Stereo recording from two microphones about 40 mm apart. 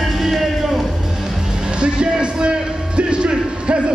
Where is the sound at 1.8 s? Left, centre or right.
Right.